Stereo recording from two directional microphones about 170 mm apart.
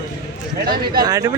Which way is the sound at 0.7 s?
60° right (ahead or behind).